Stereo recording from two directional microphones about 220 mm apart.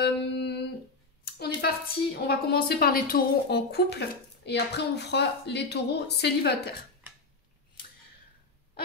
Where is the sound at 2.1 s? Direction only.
45° left (ahead or behind).